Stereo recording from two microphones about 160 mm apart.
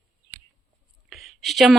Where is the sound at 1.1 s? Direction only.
Centre (ahead or behind).